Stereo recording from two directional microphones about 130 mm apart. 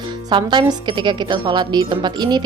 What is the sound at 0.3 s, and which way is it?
A woman's voice, 35° right (ahead or behind).